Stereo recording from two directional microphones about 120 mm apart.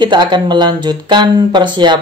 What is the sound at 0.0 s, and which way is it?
A man's voice, 40° right (ahead or behind).